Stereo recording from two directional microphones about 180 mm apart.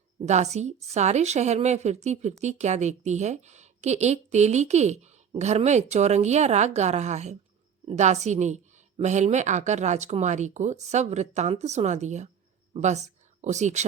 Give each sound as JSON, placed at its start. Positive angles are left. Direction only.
{"t": 0.3, "sound": "a woman's voice", "side_deg": -40}